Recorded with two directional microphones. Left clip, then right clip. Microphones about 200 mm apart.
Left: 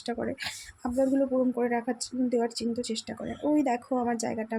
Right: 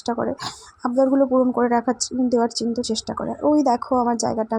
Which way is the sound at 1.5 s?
20° right (ahead or behind).